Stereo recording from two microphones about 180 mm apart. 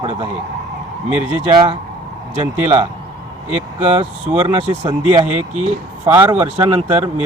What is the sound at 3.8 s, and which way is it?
Speech, 35° right (ahead or behind).